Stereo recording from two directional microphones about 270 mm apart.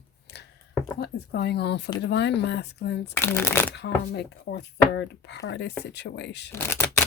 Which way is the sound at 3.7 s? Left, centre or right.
Left.